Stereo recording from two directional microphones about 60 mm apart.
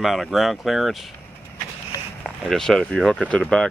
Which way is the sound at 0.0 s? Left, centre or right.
Centre.